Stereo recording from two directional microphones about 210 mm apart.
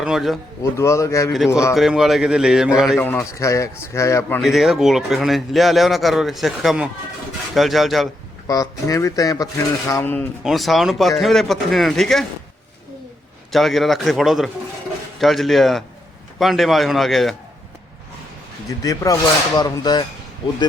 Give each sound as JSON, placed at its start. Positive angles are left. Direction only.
{"t": 0.0, "sound": "a man's voice", "side_deg": 0}
{"t": 0.6, "sound": "speech", "side_deg": 15}
{"t": 1.7, "sound": "a man's voice", "side_deg": 0}
{"t": 3.0, "sound": "speech", "side_deg": 10}
{"t": 4.4, "sound": "a man's voice", "side_deg": 0}
{"t": 8.4, "sound": "a man's voice", "side_deg": 15}
{"t": 13.5, "sound": "a man's voice", "side_deg": 0}
{"t": 18.8, "sound": "speech", "side_deg": 15}